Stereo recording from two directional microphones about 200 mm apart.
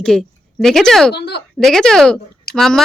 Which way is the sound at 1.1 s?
55° left (ahead or behind).